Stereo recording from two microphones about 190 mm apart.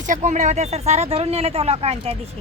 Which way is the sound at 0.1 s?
40° right (ahead or behind).